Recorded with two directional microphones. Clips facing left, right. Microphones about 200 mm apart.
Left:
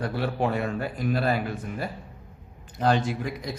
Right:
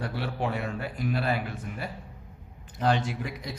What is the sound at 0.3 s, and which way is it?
Speech, 45° left (ahead or behind).